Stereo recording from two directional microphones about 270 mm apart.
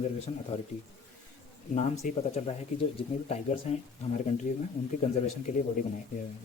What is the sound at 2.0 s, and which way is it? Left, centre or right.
Speech, left.